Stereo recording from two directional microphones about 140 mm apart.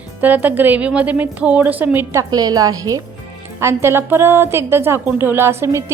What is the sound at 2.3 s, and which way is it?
A woman's voice, 25° right (ahead or behind).